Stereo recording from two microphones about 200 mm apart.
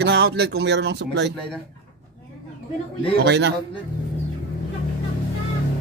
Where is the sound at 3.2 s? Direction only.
55° right (ahead or behind).